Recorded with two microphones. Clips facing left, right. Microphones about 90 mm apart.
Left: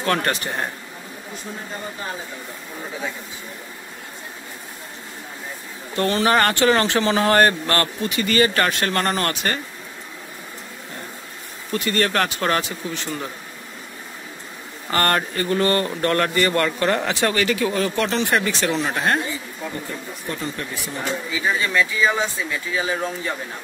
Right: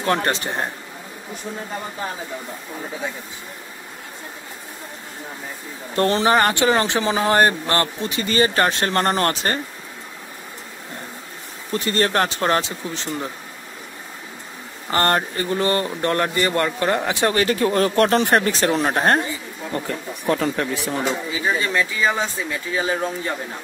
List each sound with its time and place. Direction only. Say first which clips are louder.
0.0 s speech: right 1 dB; 25° right (ahead or behind)
5.9 s speech: right 2 dB; 35° right (ahead or behind)
6.2 s speech: left 2 dB; 20° right (ahead or behind)
11.7 s speech: right 1 dB; 30° right (ahead or behind)
14.9 s speech: right 1 dB; 25° right (ahead or behind)
17.3 s speech: right 2 dB; 35° right (ahead or behind)
19.7 s speech: right 4 dB; 85° right
21.3 s speech: even; 30° right (ahead or behind)